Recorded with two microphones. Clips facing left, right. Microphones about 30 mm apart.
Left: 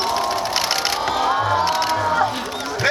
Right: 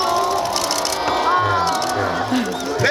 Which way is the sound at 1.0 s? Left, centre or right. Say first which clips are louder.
Right 4 dB; centre.